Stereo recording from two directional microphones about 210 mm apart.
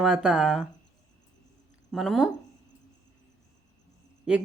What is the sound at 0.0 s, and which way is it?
Speech, 5° right (ahead or behind).